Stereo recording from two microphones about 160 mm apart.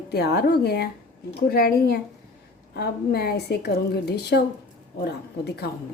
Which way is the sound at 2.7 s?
85° left.